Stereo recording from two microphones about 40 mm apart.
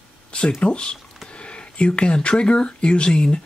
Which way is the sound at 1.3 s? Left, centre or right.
Left.